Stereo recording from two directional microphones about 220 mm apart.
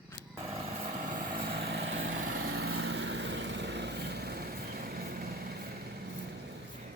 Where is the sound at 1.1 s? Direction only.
40° right (ahead or behind); by 2.5 s 65° right (ahead or behind).